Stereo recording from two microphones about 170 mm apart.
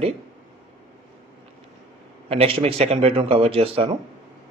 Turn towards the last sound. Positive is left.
turn(degrees=-35)  # may be behind; listen again after turning